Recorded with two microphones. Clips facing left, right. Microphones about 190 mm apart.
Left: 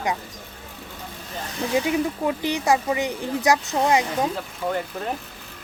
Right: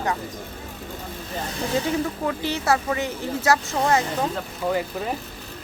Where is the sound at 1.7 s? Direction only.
15° left (ahead or behind).